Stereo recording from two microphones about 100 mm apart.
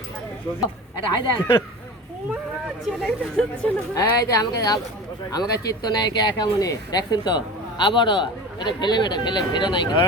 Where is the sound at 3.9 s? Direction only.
35° left (ahead or behind).